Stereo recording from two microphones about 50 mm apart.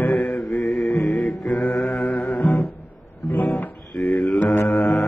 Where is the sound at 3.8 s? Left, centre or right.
Centre.